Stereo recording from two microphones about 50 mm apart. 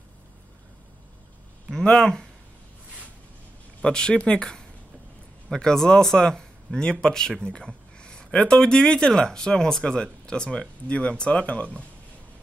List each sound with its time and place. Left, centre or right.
1.7 s speech: centre
3.8 s a man's voice: centre